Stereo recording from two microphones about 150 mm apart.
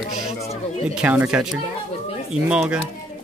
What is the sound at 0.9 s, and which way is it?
Speech, 10° right (ahead or behind).